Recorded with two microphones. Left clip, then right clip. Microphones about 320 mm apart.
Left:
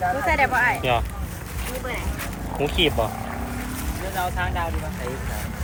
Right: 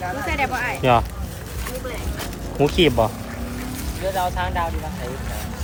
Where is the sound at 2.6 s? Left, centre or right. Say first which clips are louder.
Right 6 dB; right.